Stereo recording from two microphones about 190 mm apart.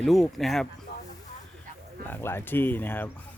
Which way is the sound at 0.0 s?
Centre (ahead or behind).